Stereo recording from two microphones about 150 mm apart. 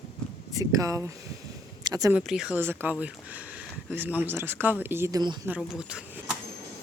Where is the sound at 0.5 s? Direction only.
20° right (ahead or behind).